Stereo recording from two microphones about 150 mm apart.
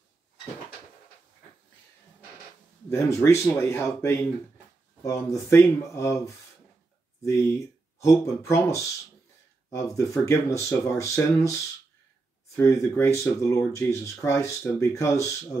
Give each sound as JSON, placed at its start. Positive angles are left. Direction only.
{"t": 2.9, "sound": "speech", "side_deg": 15}
{"t": 12.5, "sound": "speech", "side_deg": 20}